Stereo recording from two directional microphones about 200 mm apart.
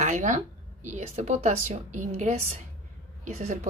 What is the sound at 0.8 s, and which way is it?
Speech, 35° right (ahead or behind).